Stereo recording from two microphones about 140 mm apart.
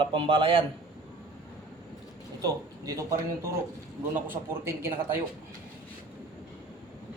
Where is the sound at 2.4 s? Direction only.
25° right (ahead or behind).